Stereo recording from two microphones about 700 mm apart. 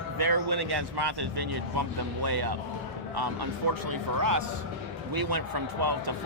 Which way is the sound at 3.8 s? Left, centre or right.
Right.